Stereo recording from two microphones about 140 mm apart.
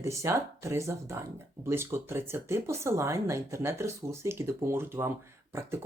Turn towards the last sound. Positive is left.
turn(degrees=-15)  # may be behind; listen again after turning